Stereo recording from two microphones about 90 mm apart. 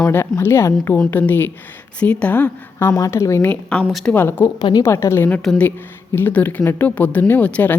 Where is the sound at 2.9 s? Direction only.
35° left (ahead or behind).